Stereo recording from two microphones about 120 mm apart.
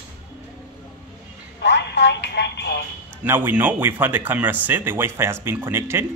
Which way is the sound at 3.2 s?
15° right (ahead or behind).